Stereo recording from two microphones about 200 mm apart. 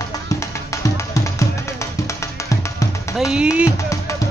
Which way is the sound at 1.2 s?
15° left (ahead or behind).